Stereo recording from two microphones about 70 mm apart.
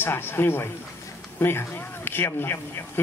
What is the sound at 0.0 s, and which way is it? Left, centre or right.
Speech, left.